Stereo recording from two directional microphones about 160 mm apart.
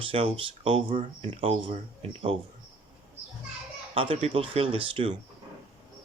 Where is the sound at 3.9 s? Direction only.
35° right (ahead or behind).